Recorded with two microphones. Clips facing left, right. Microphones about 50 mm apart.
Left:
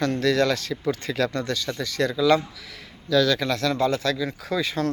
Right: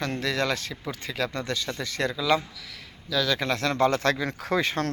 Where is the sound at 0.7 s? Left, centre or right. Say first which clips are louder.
Left 8 dB; centre.